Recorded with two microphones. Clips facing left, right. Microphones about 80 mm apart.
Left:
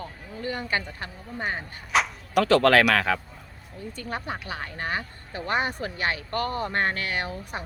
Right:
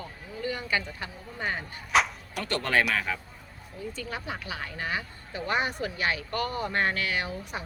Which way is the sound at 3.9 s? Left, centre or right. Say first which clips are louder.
Left 5 dB; left.